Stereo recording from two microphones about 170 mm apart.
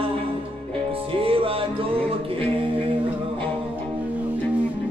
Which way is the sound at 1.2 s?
35° right (ahead or behind).